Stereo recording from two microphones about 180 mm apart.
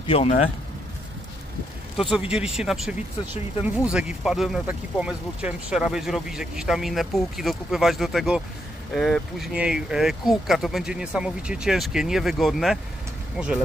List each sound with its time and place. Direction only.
0.0 s speech: 35° left (ahead or behind)
2.0 s speech: 5° right (ahead or behind)